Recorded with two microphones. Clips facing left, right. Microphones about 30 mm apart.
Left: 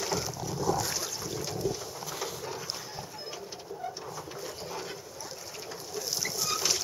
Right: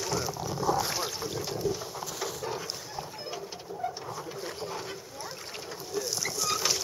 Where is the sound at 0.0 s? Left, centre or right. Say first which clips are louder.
Right 1 dB; centre.